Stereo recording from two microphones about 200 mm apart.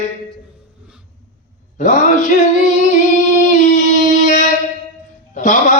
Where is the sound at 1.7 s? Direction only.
40° left (ahead or behind).